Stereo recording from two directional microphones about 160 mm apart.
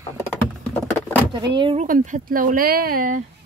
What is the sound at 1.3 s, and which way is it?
Speech, 30° right (ahead or behind).